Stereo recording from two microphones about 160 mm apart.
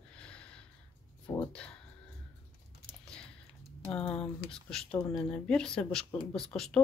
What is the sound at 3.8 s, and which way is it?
Speech, 10° left (ahead or behind).